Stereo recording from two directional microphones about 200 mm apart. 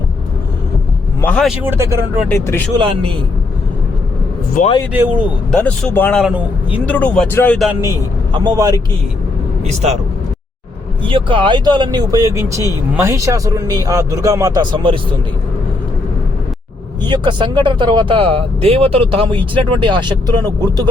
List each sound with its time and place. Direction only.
1.2 s speech: 5° left (ahead or behind)
1.6 s a man's voice: 10° right (ahead or behind)
2.7 s speech: 25° right (ahead or behind)
4.9 s a man's voice: 10° right (ahead or behind)
5.5 s speech: 5° left (ahead or behind)
6.8 s speech: 10° left (ahead or behind)
7.7 s speech: 15° right (ahead or behind)
9.6 s speech: 35° right (ahead or behind)
11.0 s a man's voice: 25° right (ahead or behind)
17.1 s speech: 25° right (ahead or behind)